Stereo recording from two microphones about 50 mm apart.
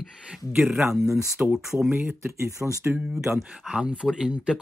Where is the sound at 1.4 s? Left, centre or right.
Right.